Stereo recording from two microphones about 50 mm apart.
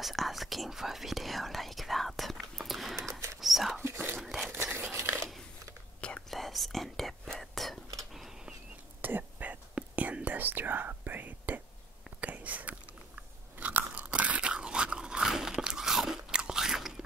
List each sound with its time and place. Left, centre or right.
0.0 s speech: centre
3.0 s whispering: right
3.3 s whispering: centre
3.8 s whispering: right
4.2 s a sound: centre
5.9 s whispering: left
6.3 s whispering: centre
9.0 s whispering: right
12.2 s biting: right
14.5 s dog: centre
15.5 s biting: centre